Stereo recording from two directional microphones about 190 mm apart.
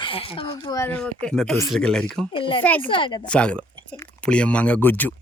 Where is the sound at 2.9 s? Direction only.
25° left (ahead or behind).